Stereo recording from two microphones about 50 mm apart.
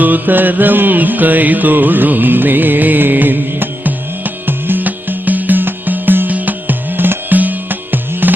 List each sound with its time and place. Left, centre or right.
0.0 s music: right